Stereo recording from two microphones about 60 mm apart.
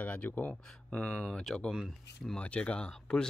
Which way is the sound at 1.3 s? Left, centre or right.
Centre.